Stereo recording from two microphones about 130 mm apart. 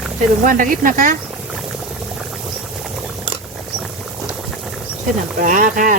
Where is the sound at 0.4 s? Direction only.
90° right.